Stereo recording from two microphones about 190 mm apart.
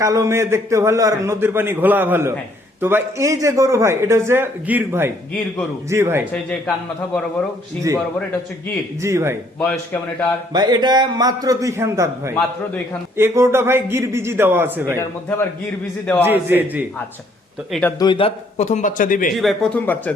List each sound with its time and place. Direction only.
0.0 s speech: 15° right (ahead or behind)
7.9 s speech: 15° right (ahead or behind)
9.6 s a man's voice: 10° left (ahead or behind)
10.5 s a man's voice: 20° right (ahead or behind)
16.2 s speech: 10° right (ahead or behind)
17.7 s speech: 5° left (ahead or behind)
18.0 s a man's voice: 25° left (ahead or behind); by 19.3 s 45° left (ahead or behind)
19.4 s a man's voice: centre (ahead or behind)